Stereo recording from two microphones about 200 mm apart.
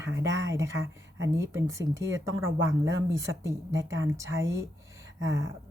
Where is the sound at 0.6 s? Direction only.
65° right (ahead or behind).